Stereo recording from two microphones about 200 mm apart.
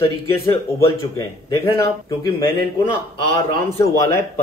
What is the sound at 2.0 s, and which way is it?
Speech, 20° left (ahead or behind).